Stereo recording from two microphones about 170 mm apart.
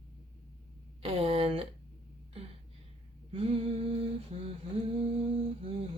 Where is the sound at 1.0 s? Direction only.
35° right (ahead or behind).